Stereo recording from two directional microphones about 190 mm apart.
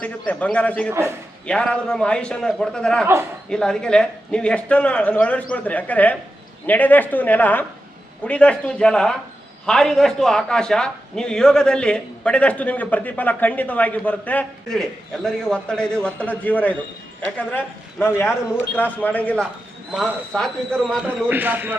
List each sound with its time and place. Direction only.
0.0 s a man's voice: 5° left (ahead or behind)
0.9 s a man's voice: 15° right (ahead or behind)
1.5 s a man's voice: 5° left (ahead or behind)